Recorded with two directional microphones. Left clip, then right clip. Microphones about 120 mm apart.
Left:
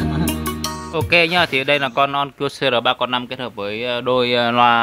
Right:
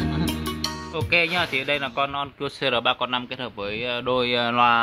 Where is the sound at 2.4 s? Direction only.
25° left (ahead or behind).